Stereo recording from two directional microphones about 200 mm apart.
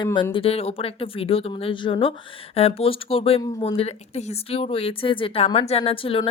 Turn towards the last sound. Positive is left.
turn(degrees=25)  # may be behind; listen again after turning